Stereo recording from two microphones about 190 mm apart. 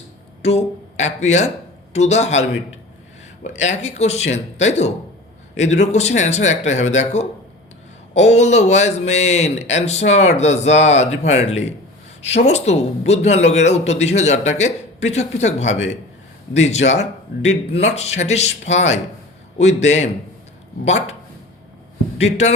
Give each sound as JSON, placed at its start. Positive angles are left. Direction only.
{"t": 0.4, "sound": "speech", "side_deg": 35}
{"t": 22.2, "sound": "speech", "side_deg": 35}